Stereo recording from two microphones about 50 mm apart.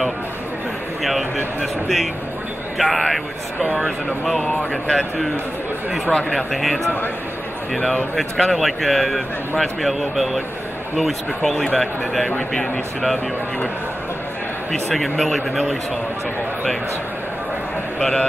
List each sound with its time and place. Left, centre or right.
2.8 s speech: centre
8.2 s speech: centre
12.3 s speech: centre
14.7 s speech: centre
17.9 s a man's voice: centre